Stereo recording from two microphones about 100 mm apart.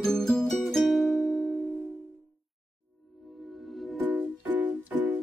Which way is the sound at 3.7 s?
Centre (ahead or behind).